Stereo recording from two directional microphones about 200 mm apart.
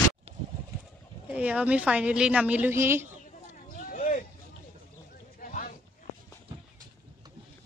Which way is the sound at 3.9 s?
40° left (ahead or behind).